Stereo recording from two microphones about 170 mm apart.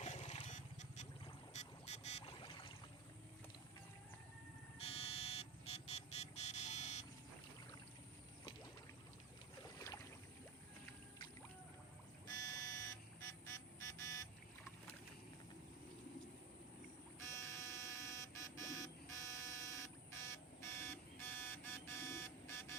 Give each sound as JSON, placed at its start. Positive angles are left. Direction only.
{"t": 0.0, "sound": "a sound", "side_deg": 40}
{"t": 1.5, "sound": "boat", "side_deg": 40}
{"t": 4.8, "sound": "vehicle", "side_deg": 35}
{"t": 9.7, "sound": "boat", "side_deg": 20}
{"t": 12.3, "sound": "vehicle", "side_deg": 20}
{"t": 17.2, "sound": "buzzer", "side_deg": 15}